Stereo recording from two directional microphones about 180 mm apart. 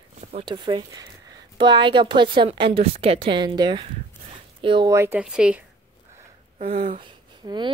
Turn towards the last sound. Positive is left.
turn(degrees=-25)  # may be behind; listen again after turning